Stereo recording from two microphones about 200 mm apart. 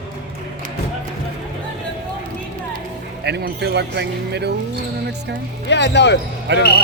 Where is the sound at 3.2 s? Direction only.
55° right (ahead or behind).